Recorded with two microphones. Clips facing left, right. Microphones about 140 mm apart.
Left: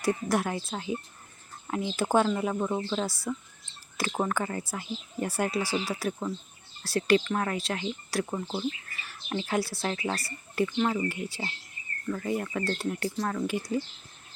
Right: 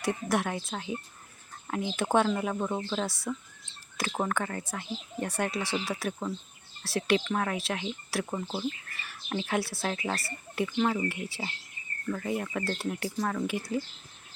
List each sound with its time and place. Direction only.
0.0 s speech: centre (ahead or behind)